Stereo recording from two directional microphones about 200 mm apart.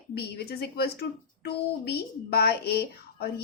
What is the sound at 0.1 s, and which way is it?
A woman's voice, 55° left (ahead or behind).